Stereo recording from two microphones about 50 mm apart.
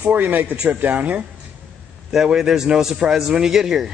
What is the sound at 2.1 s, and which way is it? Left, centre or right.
A man's voice, centre.